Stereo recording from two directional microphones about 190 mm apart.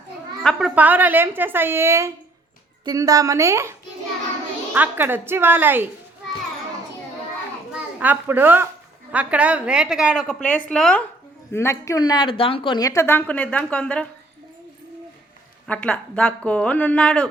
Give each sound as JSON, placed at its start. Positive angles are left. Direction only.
{"t": 0.4, "sound": "a woman's voice", "side_deg": -5}
{"t": 7.9, "sound": "a woman's voice", "side_deg": -10}
{"t": 11.5, "sound": "a woman's voice", "side_deg": 15}
{"t": 15.6, "sound": "a woman's voice", "side_deg": 10}